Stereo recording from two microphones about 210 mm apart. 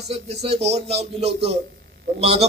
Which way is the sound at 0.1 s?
30° right (ahead or behind).